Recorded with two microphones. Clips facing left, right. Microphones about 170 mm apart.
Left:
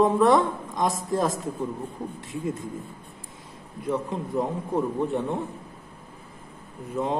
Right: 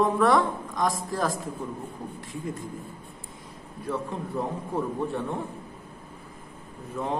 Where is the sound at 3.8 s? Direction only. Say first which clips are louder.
Left 3 dB; 20° left (ahead or behind).